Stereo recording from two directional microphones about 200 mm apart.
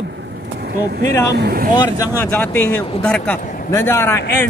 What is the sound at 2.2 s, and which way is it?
A man's voice, 10° left (ahead or behind).